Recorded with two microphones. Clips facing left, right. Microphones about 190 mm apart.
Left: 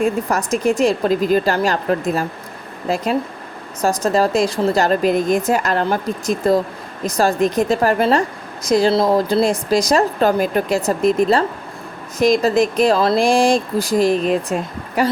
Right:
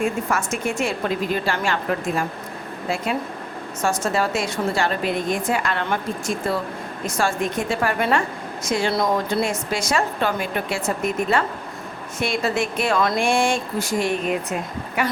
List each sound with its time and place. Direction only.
0.0 s speech: 35° left (ahead or behind)